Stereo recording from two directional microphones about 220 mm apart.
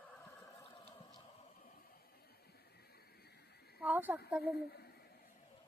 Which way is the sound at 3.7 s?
5° right (ahead or behind).